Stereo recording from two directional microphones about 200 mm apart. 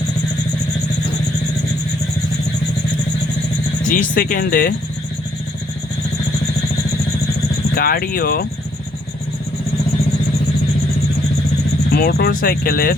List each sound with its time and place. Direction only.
3.8 s speech: 45° left (ahead or behind)
7.8 s speech: 50° left (ahead or behind)
11.9 s speech: 50° left (ahead or behind)